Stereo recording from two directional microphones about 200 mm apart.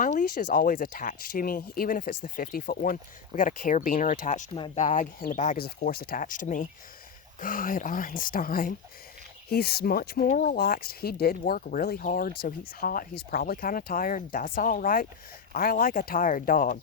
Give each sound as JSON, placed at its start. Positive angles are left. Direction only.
{"t": 0.0, "sound": "speech", "side_deg": 40}
{"t": 4.5, "sound": "speech", "side_deg": 25}
{"t": 4.8, "sound": "speech", "side_deg": 40}
{"t": 5.6, "sound": "speech", "side_deg": 50}